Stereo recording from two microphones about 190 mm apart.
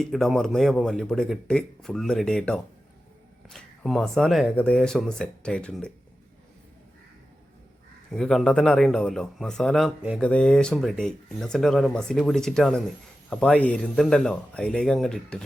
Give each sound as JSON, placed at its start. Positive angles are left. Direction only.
{"t": 0.0, "sound": "speech", "side_deg": 0}
{"t": 8.1, "sound": "speech", "side_deg": 5}